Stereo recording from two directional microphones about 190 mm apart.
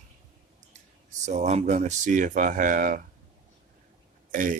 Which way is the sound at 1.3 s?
35° right (ahead or behind).